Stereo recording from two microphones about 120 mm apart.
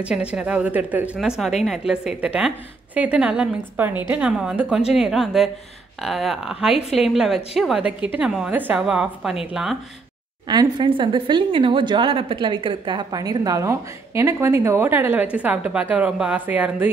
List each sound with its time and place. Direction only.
0.0 s a woman's voice: 10° right (ahead or behind)
10.5 s a woman's voice: 40° right (ahead or behind); by 16.9 s 15° right (ahead or behind)